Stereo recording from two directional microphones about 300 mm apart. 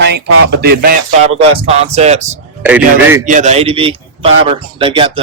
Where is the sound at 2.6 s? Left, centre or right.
Centre.